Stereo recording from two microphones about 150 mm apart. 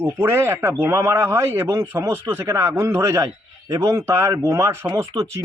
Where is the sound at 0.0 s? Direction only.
15° right (ahead or behind).